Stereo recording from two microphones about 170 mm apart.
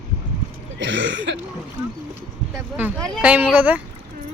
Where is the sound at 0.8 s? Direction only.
90° right.